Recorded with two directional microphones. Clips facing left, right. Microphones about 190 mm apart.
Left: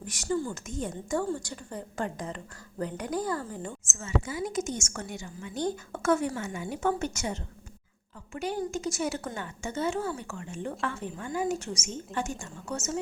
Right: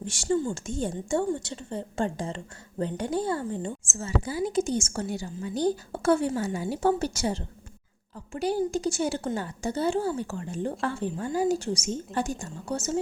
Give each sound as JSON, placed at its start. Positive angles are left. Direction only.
{"t": 0.0, "sound": "a woman's voice", "side_deg": -25}